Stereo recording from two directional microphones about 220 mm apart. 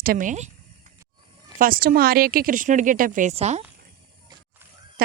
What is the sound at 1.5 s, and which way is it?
A woman's voice, 40° right (ahead or behind).